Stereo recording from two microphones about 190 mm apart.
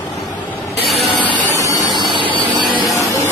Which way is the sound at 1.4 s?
15° left (ahead or behind).